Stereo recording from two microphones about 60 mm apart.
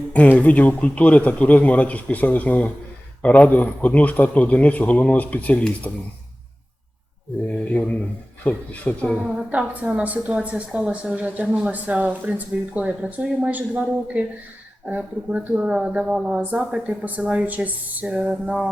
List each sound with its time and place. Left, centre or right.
0.1 s a man's voice: left
7.7 s a man's voice: left
9.1 s a woman's voice: centre
16.4 s a woman's voice: right